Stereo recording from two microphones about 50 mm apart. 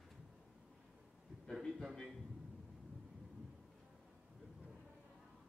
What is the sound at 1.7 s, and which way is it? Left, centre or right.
Speech, centre.